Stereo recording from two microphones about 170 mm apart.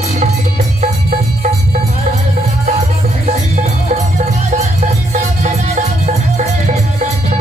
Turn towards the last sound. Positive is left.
turn(degrees=-40)  # may be behind; listen again after turning